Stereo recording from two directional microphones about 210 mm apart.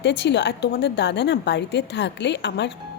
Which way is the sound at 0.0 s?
55° left (ahead or behind).